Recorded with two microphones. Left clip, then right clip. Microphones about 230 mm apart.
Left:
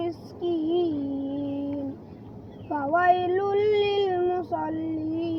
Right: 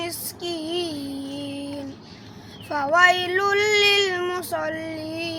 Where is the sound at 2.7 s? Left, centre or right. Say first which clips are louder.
Right 4 dB; right.